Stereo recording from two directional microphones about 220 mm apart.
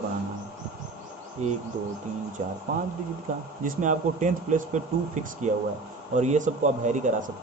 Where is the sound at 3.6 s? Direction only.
35° right (ahead or behind).